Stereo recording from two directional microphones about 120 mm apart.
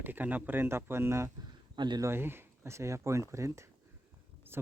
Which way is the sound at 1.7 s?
40° right (ahead or behind).